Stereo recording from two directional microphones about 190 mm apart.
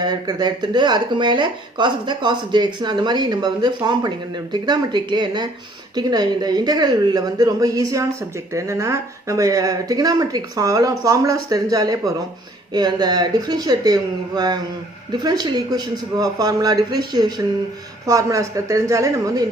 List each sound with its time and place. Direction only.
0.0 s a woman's voice: 20° right (ahead or behind)